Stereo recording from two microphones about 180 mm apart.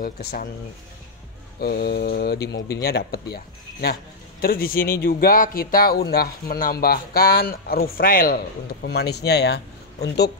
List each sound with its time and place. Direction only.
0.0 s speech: 55° left (ahead or behind)
1.6 s speech: 60° left (ahead or behind)
8.8 s speech: 65° left (ahead or behind)